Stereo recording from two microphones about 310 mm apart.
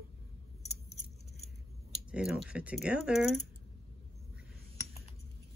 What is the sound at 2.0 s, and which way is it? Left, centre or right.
Speech, centre.